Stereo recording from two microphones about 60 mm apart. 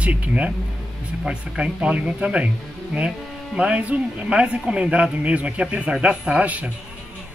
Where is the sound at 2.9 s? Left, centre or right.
Centre.